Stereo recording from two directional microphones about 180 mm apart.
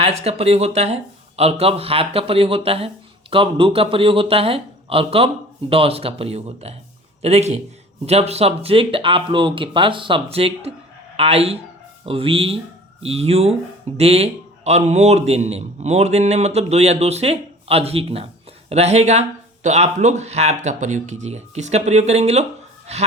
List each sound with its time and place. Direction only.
0.0 s speech: 35° right (ahead or behind)